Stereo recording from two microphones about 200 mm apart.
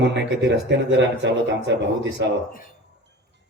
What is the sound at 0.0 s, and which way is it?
Speech, 60° right (ahead or behind).